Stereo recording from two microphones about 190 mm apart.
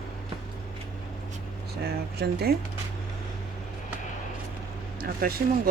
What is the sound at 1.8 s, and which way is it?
Speech, 55° right (ahead or behind).